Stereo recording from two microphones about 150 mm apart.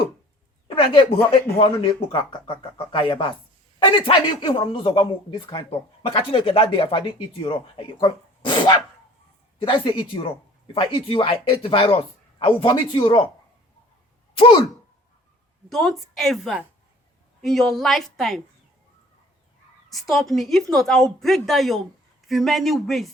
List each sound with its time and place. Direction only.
0.9 s speech: 35° left (ahead or behind)
14.3 s speech: 40° left (ahead or behind)
15.7 s a woman's voice: centre (ahead or behind)
19.9 s a woman's voice: centre (ahead or behind)